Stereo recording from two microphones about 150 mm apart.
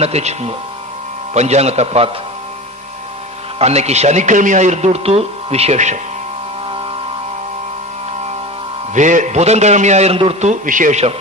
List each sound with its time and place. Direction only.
0.0 s a man's voice: 45° right (ahead or behind)
3.5 s a man's voice: 45° right (ahead or behind)
8.9 s a man's voice: 55° right (ahead or behind)
10.5 s a man's voice: 60° right (ahead or behind)